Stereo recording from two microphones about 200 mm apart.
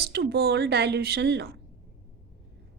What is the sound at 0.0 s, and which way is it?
A woman's voice, 55° right (ahead or behind).